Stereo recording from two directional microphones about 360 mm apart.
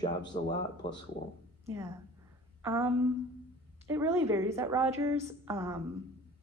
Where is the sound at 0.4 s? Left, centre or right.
Centre.